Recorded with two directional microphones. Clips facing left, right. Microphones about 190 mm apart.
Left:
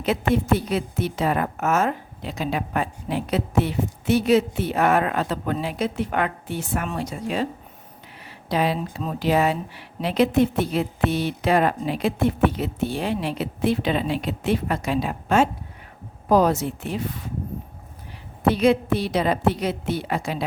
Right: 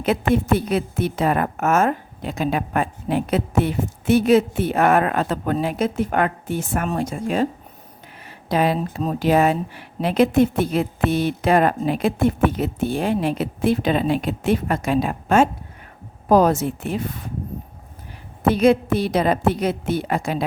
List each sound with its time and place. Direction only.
0.0 s a woman's voice: 50° right (ahead or behind)
8.4 s a woman's voice: 50° right (ahead or behind)
18.4 s a woman's voice: 45° right (ahead or behind)